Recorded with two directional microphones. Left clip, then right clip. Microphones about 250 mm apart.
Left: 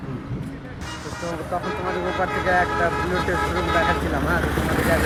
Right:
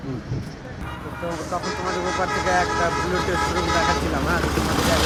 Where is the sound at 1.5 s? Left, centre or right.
Centre.